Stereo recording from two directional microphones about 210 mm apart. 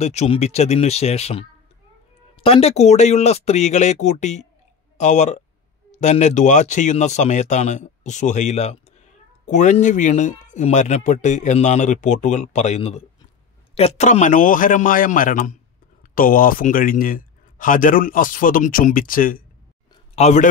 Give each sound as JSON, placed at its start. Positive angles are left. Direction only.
{"t": 0.0, "sound": "a man's voice", "side_deg": 30}